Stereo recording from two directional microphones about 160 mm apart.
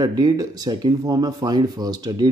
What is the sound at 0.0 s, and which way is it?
Speech, 25° right (ahead or behind).